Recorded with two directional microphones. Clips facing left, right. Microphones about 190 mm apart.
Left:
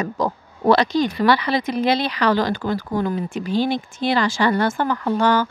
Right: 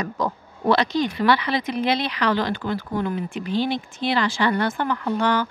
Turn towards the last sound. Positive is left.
turn(degrees=40)  # may be behind; listen again after turning